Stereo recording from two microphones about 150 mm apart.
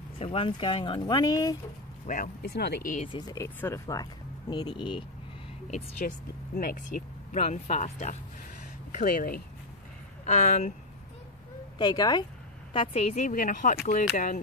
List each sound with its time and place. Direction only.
0.2 s speech: 35° left (ahead or behind)
2.0 s speech: 60° left (ahead or behind)
3.1 s speech: 25° left (ahead or behind)
3.4 s speech: 15° left (ahead or behind); by 5.0 s 30° left (ahead or behind)
5.9 s speech: 70° left (ahead or behind)
7.3 s speech: 50° left (ahead or behind)
8.9 s speech: 70° left (ahead or behind)
10.2 s a woman's voice: 55° left (ahead or behind)
11.8 s speech: 30° left (ahead or behind)
12.7 s a woman's voice: 40° left (ahead or behind); by 14.4 s 60° left (ahead or behind)